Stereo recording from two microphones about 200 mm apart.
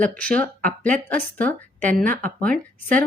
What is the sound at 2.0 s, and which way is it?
Speech, 40° right (ahead or behind).